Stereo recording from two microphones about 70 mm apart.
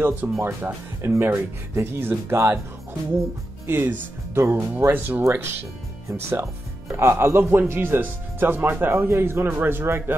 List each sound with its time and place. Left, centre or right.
0.0 s speech: right
3.6 s speech: right